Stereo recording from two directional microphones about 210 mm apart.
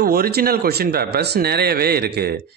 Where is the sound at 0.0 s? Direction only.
45° right (ahead or behind).